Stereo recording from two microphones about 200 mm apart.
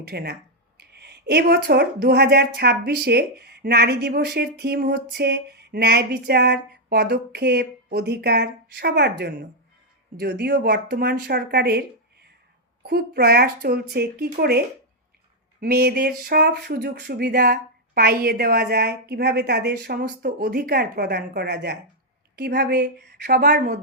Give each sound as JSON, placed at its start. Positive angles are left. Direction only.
{"t": 0.0, "sound": "speech", "side_deg": -55}
{"t": 12.8, "sound": "speech", "side_deg": -55}
{"t": 15.6, "sound": "a woman's voice", "side_deg": -50}